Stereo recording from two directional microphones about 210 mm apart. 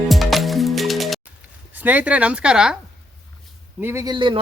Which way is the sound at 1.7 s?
10° right (ahead or behind).